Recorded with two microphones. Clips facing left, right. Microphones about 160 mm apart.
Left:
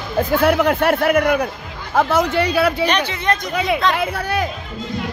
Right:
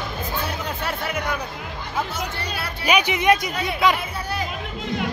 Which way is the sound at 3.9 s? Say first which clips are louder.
Left 7 dB; 80° left.